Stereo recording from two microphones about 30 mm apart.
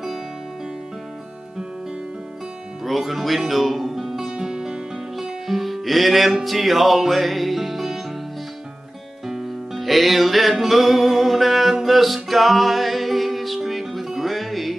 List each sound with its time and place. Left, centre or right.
2.8 s speech: centre
4.3 s music: right
5.1 s music: centre
9.3 s music: centre